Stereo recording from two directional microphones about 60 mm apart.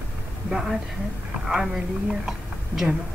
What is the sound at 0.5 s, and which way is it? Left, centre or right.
A woman's voice, centre.